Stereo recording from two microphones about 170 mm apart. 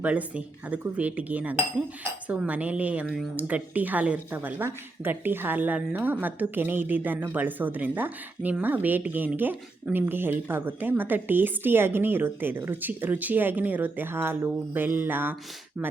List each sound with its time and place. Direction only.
0.0 s a woman's voice: 10° right (ahead or behind)